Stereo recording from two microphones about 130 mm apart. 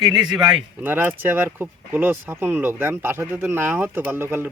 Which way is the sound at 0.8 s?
15° right (ahead or behind).